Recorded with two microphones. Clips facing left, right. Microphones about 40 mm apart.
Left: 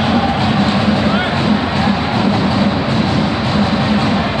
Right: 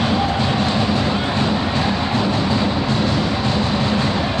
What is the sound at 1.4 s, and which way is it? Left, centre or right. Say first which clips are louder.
Music: left 4 dB; left.